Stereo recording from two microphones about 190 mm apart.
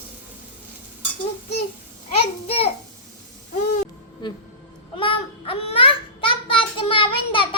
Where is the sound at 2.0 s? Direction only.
30° left (ahead or behind).